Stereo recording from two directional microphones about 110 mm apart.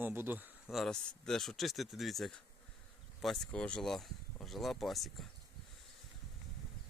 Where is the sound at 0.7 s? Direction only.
Centre (ahead or behind).